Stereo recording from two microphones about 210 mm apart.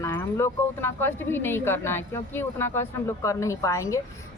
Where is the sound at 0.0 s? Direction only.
15° left (ahead or behind).